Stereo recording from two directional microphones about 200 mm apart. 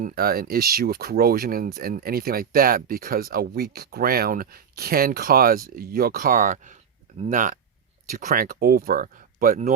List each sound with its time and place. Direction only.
0.0 s speech: 45° right (ahead or behind)